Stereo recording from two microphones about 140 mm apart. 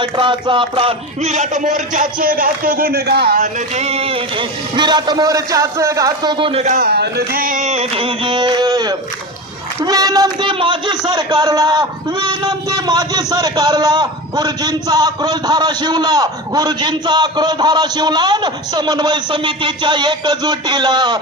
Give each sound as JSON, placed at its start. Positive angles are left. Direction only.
{"t": 0.0, "sound": "speech", "side_deg": -35}
{"t": 1.3, "sound": "a man's voice", "side_deg": -60}
{"t": 3.8, "sound": "speech", "side_deg": -50}
{"t": 6.7, "sound": "a man's voice", "side_deg": -90}
{"t": 7.3, "sound": "a man's voice", "side_deg": -75}